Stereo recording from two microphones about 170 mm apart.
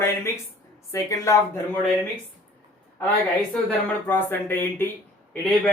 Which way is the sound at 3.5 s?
10° left (ahead or behind).